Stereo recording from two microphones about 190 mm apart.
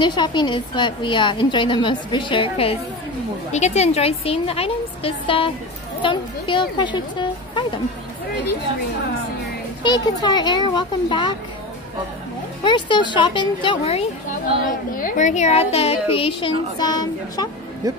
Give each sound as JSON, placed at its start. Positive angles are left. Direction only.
{"t": 0.0, "sound": "a woman's voice", "side_deg": 25}
{"t": 9.8, "sound": "a woman's voice", "side_deg": 20}
{"t": 12.6, "sound": "a woman's voice", "side_deg": 25}
{"t": 14.6, "sound": "a woman's voice", "side_deg": 45}